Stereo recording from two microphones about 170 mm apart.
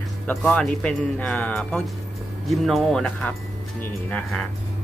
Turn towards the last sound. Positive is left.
turn(degrees=5)  # may be behind; listen again after turning